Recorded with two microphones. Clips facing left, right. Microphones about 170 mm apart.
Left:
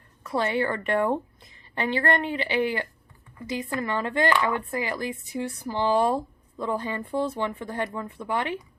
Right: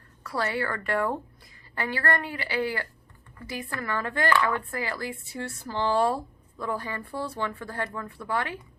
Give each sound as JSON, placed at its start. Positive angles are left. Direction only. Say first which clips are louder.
{"t": 0.2, "sound": "speech", "louder": "left 4 dB", "side_deg": 20}